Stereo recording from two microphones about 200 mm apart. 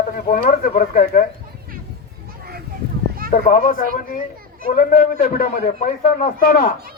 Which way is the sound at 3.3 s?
45° left (ahead or behind).